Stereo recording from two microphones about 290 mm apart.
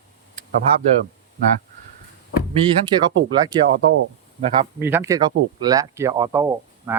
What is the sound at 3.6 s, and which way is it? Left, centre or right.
Speech, right.